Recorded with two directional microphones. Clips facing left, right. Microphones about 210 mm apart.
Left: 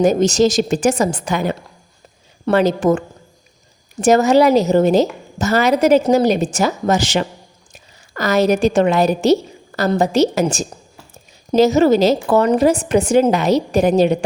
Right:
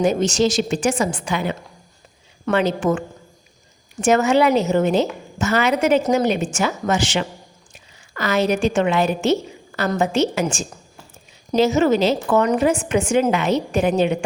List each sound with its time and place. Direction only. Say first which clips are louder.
0.0 s a woman's voice: left 4 dB; 40° left (ahead or behind)
4.0 s a woman's voice: left 4 dB; 40° left (ahead or behind)